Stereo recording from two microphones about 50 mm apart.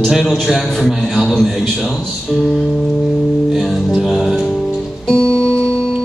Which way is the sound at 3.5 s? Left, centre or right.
Centre.